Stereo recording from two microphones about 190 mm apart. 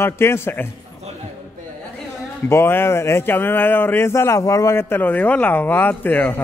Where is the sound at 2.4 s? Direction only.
15° left (ahead or behind).